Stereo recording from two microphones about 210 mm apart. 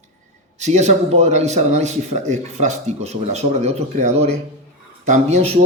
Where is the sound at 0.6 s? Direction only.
35° right (ahead or behind).